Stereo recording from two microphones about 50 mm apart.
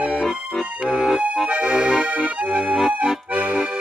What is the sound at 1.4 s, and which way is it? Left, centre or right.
Accordion, right.